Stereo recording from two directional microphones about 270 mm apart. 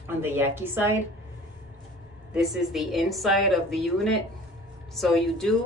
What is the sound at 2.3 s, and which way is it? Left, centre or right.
Speech, centre.